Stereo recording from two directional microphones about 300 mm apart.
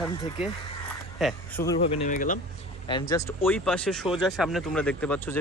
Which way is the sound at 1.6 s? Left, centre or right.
Centre.